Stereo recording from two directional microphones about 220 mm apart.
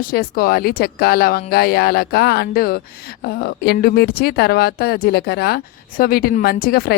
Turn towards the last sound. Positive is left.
turn(degrees=45)  # may be behind; listen again after turning